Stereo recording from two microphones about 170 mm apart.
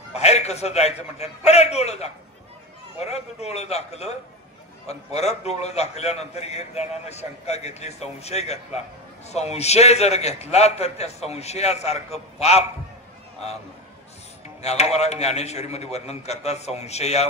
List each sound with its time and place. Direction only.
0.1 s a man's voice: 40° left (ahead or behind)
14.6 s a man's voice: 40° left (ahead or behind)